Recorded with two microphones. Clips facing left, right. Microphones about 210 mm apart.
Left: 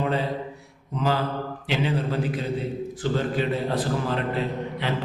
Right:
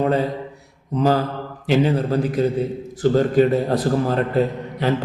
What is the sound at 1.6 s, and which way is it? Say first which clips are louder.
A man's voice: right 9 dB; 45° right (ahead or behind).